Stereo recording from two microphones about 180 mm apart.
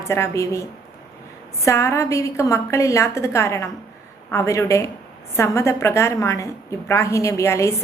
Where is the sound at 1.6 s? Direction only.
15° left (ahead or behind).